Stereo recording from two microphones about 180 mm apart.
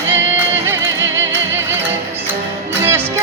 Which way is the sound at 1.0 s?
90° right.